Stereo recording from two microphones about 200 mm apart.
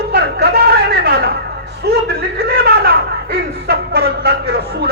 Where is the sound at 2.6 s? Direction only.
50° right (ahead or behind).